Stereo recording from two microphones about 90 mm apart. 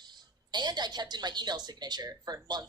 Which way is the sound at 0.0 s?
50° right (ahead or behind).